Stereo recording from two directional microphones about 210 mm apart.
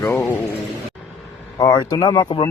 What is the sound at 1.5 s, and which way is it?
Speech, 20° left (ahead or behind).